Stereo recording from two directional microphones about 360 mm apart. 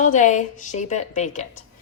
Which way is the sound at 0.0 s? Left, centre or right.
Centre.